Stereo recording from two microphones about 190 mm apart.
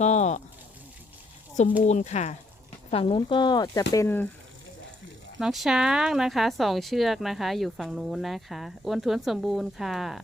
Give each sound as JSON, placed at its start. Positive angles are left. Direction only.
{"t": 0.0, "sound": "speech", "side_deg": 35}
{"t": 1.9, "sound": "speech", "side_deg": 35}
{"t": 5.4, "sound": "speech", "side_deg": 0}